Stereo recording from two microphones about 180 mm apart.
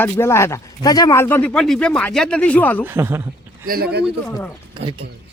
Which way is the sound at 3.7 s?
60° right (ahead or behind).